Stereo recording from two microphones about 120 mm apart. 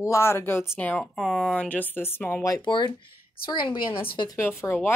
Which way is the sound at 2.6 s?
40° left (ahead or behind).